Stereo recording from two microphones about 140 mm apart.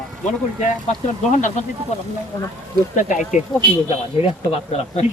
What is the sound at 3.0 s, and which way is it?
Speech, 65° left (ahead or behind).